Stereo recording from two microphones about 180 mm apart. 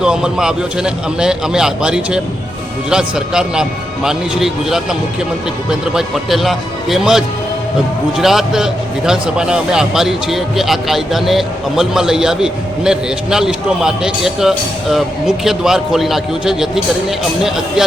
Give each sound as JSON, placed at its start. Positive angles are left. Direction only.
{"t": 0.0, "sound": "speech", "side_deg": -5}